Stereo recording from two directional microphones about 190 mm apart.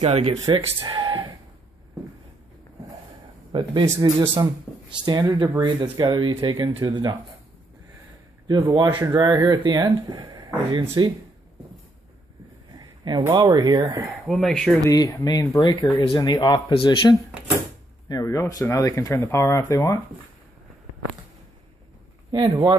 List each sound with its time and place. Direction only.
0.0 s speech: 35° right (ahead or behind)
0.7 s a sound: 20° right (ahead or behind)
3.5 s speech: 20° right (ahead or behind)
4.7 s a sound: 10° left (ahead or behind)
5.0 s speech: 20° right (ahead or behind)
8.5 s speech: 20° right (ahead or behind)
12.7 s a sound: 20° right (ahead or behind)
13.2 s speech: 20° right (ahead or behind)
14.0 s speech: centre (ahead or behind)
14.9 s speech: 20° left (ahead or behind)
22.3 s speech: 20° right (ahead or behind)